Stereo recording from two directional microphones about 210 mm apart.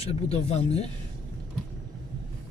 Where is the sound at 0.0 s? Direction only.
30° left (ahead or behind).